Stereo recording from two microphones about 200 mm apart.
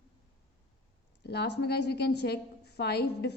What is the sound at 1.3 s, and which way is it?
A woman's voice, 55° left (ahead or behind).